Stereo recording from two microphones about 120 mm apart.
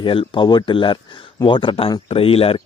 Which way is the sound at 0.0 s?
45° left (ahead or behind).